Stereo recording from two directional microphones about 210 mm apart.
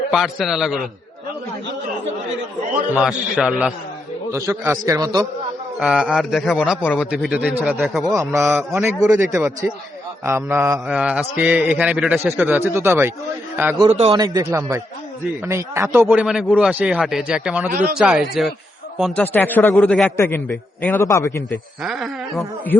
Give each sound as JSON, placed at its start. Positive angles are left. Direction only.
{"t": 0.1, "sound": "a man's voice", "side_deg": 0}
{"t": 2.9, "sound": "a man's voice", "side_deg": -5}
{"t": 5.8, "sound": "a man's voice", "side_deg": -5}
{"t": 7.1, "sound": "a man's voice", "side_deg": -5}
{"t": 13.8, "sound": "a man's voice", "side_deg": -25}
{"t": 21.8, "sound": "a man's voice", "side_deg": 0}